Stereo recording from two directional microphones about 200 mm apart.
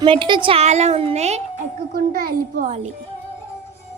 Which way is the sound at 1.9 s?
50° right (ahead or behind).